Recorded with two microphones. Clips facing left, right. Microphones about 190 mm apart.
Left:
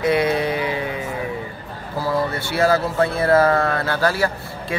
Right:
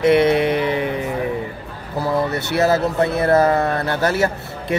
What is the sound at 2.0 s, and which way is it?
Speech, 20° right (ahead or behind).